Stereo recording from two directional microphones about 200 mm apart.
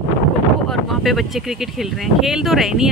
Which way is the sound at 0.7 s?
Centre (ahead or behind).